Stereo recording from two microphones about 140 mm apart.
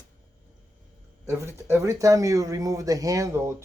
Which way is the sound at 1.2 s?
20° right (ahead or behind).